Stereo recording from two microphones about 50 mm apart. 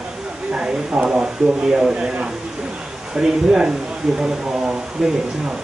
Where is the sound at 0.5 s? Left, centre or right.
Centre.